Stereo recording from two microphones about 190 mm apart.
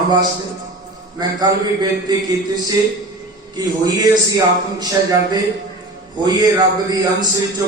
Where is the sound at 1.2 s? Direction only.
20° right (ahead or behind).